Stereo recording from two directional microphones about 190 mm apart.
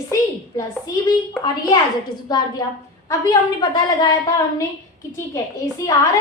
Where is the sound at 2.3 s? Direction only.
20° left (ahead or behind).